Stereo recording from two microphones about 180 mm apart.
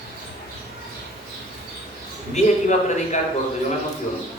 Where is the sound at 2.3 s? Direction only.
40° left (ahead or behind).